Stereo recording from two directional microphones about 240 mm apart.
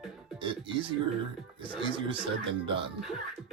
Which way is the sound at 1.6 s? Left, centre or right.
Right.